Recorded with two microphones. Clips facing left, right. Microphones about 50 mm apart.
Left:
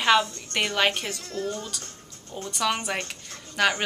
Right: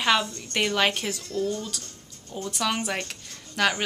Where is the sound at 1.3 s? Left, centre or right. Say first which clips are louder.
Right 3 dB; left.